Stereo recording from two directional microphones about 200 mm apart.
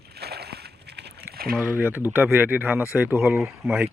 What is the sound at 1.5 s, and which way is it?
Speech, 5° right (ahead or behind).